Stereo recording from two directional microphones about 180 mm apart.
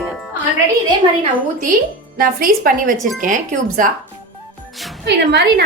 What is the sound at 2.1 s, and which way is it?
Speech, 55° right (ahead or behind).